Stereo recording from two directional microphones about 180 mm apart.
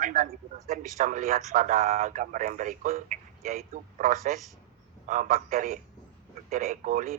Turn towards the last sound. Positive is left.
turn(degrees=-50)  # may be behind; listen again after turning